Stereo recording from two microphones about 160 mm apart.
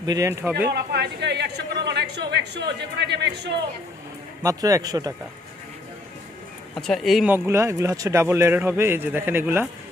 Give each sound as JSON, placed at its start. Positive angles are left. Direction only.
{"t": 0.0, "sound": "a man's voice", "side_deg": -20}
{"t": 0.7, "sound": "a woman's voice", "side_deg": -90}
{"t": 4.4, "sound": "a man's voice", "side_deg": -20}
{"t": 6.8, "sound": "speech", "side_deg": 0}
{"t": 7.3, "sound": "speech", "side_deg": -15}